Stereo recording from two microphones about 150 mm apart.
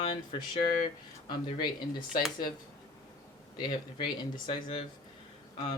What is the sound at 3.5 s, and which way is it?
Speech, 30° left (ahead or behind).